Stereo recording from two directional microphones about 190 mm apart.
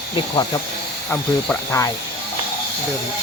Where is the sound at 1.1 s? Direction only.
10° left (ahead or behind).